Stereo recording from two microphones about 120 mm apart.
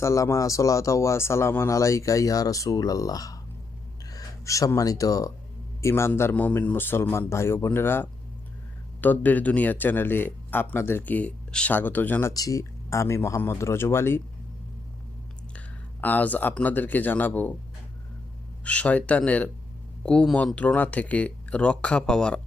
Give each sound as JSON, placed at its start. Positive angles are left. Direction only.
{"t": 0.0, "sound": "speech", "side_deg": 25}
{"t": 12.3, "sound": "speech", "side_deg": 30}
{"t": 15.5, "sound": "speech", "side_deg": 15}
{"t": 18.6, "sound": "speech", "side_deg": 10}